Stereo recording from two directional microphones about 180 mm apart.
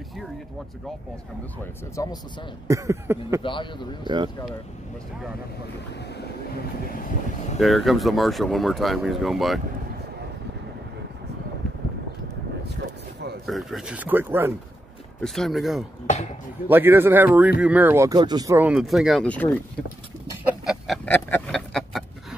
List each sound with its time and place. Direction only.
1.6 s speech: 15° left (ahead or behind)
2.7 s speech: 15° right (ahead or behind)
3.4 s speech: 25° left (ahead or behind)
6.9 s train: 50° left (ahead or behind)
7.5 s speech: centre (ahead or behind)
13.5 s speech: centre (ahead or behind)
15.1 s speech: centre (ahead or behind)
16.6 s speech: 10° right (ahead or behind)
18.6 s speech: 5° right (ahead or behind)
20.6 s a sound: centre (ahead or behind)